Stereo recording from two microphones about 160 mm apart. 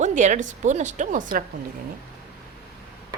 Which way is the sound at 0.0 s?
50° right (ahead or behind).